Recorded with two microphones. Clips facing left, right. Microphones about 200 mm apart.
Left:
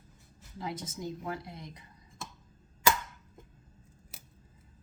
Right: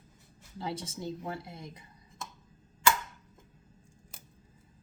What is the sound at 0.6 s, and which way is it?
A woman's voice, 30° right (ahead or behind).